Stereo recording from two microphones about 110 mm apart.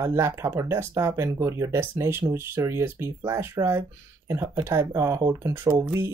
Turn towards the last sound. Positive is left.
turn(degrees=-25)  # may be behind; listen again after turning